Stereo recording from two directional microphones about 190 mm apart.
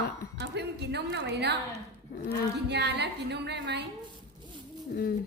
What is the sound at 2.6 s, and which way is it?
A woman's voice, 60° right (ahead or behind).